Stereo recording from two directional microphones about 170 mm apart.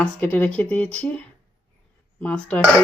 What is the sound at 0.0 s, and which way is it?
Speech, 10° left (ahead or behind).